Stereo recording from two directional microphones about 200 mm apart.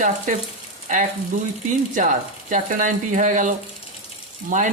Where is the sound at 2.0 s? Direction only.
40° right (ahead or behind).